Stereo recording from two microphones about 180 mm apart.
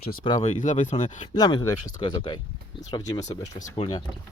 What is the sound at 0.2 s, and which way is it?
Speech, 25° left (ahead or behind).